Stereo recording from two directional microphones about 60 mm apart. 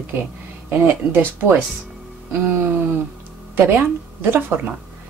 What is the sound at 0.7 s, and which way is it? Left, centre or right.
Speech, right.